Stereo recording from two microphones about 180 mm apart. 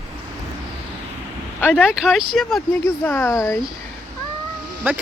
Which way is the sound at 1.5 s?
5° left (ahead or behind).